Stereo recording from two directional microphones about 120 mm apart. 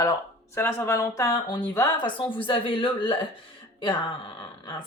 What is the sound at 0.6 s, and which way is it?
Speech, 20° left (ahead or behind).